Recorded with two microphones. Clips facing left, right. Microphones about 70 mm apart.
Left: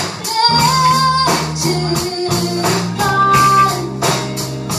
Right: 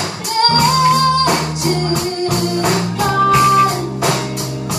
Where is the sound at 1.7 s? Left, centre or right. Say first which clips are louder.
Right 1 dB; left.